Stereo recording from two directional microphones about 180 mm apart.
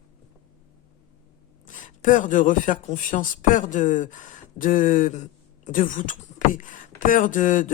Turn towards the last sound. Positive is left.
turn(degrees=45)  # may be behind; listen again after turning